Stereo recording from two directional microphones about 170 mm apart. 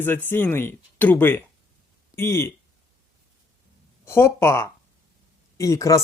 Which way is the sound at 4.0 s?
15° left (ahead or behind).